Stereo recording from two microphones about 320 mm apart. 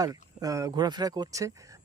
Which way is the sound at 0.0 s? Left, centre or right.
Centre.